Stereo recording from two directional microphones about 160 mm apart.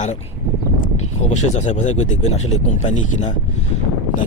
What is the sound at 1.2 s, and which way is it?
Speech, 45° left (ahead or behind).